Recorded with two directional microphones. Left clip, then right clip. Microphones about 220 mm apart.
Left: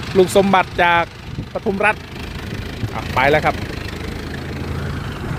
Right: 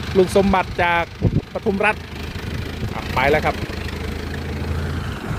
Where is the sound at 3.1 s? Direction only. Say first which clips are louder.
Left 3 dB; 15° left (ahead or behind).